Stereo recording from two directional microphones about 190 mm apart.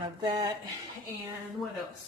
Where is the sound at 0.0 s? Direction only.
20° right (ahead or behind).